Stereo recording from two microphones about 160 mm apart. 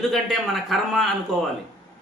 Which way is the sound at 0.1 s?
Centre (ahead or behind).